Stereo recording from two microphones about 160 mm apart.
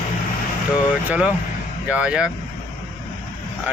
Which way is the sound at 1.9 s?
5° right (ahead or behind).